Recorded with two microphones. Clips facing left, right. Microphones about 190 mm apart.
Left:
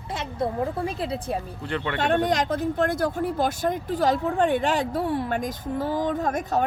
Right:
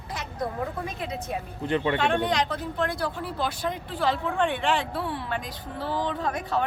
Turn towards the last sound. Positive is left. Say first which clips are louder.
# left 3 dB
turn(degrees=45)  # may be behind; listen again after turning